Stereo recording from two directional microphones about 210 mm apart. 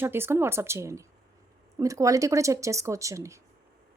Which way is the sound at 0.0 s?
10° right (ahead or behind).